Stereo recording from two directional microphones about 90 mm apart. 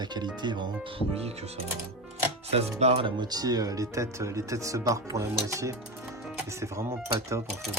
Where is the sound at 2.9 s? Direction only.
70° right (ahead or behind).